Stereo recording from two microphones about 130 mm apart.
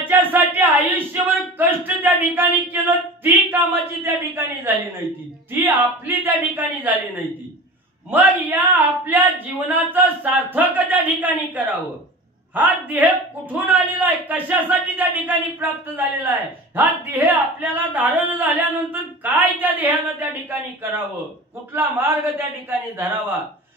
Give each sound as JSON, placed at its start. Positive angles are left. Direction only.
{"t": 0.0, "sound": "a sound", "side_deg": -15}
{"t": 3.4, "sound": "speech", "side_deg": -15}
{"t": 8.1, "sound": "speech", "side_deg": -15}